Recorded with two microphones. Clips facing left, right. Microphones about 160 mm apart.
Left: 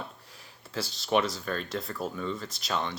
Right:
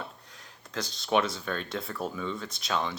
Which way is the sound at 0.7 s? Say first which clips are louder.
Even; 5° left (ahead or behind).